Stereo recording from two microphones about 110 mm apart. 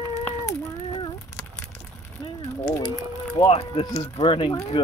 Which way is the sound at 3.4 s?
70° left (ahead or behind).